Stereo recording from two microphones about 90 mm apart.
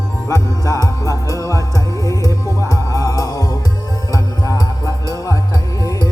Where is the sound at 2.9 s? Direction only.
40° left (ahead or behind).